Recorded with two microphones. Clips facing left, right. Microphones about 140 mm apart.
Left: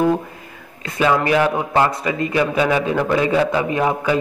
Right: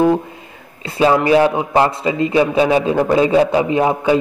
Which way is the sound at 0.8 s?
30° right (ahead or behind).